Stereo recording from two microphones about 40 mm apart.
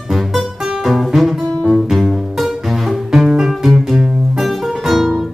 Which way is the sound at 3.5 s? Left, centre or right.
Centre.